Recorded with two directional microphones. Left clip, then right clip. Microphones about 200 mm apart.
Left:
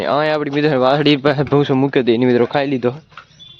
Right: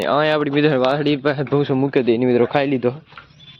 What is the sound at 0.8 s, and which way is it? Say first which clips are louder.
Speech: left 4 dB; 20° left (ahead or behind).